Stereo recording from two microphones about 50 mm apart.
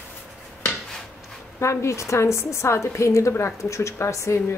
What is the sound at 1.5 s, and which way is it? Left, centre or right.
Speech, left.